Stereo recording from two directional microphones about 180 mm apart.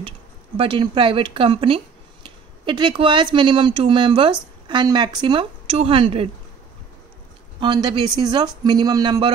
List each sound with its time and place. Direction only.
0.6 s speech: 25° right (ahead or behind)
7.6 s speech: 25° right (ahead or behind)